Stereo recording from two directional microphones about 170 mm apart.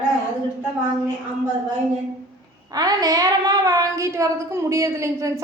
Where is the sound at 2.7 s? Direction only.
20° right (ahead or behind).